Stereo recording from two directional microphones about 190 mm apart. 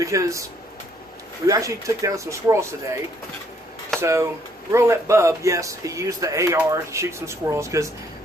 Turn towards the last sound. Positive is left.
turn(degrees=-15)  # may be behind; listen again after turning